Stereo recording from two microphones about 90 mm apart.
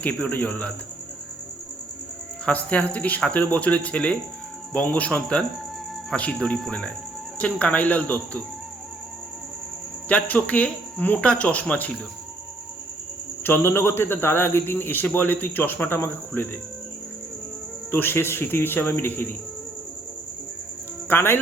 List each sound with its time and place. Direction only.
0.0 s speech: 20° left (ahead or behind)
2.5 s speech: 15° left (ahead or behind)
10.1 s speech: 15° left (ahead or behind)
13.4 s speech: 25° left (ahead or behind)
17.9 s speech: 25° left (ahead or behind)
21.1 s speech: 25° left (ahead or behind)